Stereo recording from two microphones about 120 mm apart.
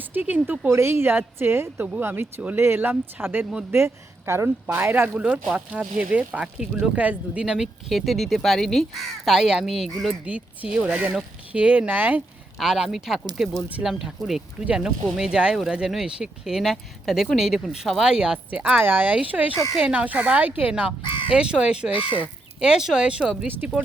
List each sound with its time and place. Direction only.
0.1 s a woman's voice: 15° right (ahead or behind)
10.3 s speech: 10° right (ahead or behind)
12.5 s speech: 5° right (ahead or behind)